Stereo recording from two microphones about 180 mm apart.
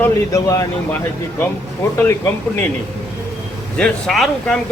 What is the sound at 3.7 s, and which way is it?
Speech, 5° left (ahead or behind).